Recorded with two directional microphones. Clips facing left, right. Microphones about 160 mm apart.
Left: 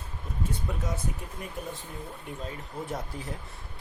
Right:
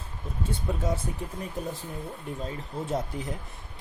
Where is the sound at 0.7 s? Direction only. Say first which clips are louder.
Right 4 dB; 30° right (ahead or behind).